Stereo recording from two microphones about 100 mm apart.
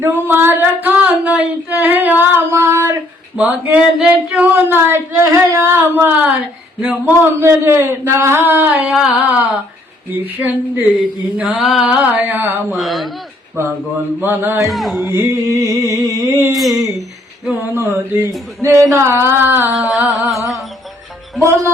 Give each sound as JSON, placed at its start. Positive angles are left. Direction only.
{"t": 0.0, "sound": "a sound", "side_deg": -25}
{"t": 3.3, "sound": "speech", "side_deg": -15}
{"t": 8.9, "sound": "music", "side_deg": -5}
{"t": 10.1, "sound": "speech", "side_deg": -20}
{"t": 12.7, "sound": "music", "side_deg": 0}
{"t": 14.3, "sound": "speech", "side_deg": -20}
{"t": 14.6, "sound": "music", "side_deg": 0}
{"t": 15.0, "sound": "a sound", "side_deg": -25}
{"t": 16.5, "sound": "music", "side_deg": 0}
{"t": 17.5, "sound": "speech", "side_deg": -20}
{"t": 19.7, "sound": "music", "side_deg": 0}
{"t": 21.4, "sound": "speech", "side_deg": -30}